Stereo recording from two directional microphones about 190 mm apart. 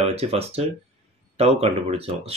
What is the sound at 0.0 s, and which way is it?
Speech, 30° right (ahead or behind).